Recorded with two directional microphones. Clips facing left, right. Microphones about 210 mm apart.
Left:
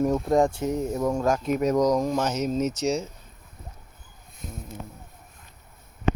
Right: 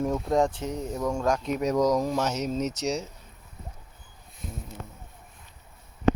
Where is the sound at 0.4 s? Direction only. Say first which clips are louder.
Left 4 dB; 10° left (ahead or behind).